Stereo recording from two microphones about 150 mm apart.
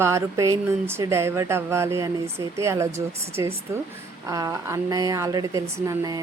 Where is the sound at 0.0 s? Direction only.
20° right (ahead or behind).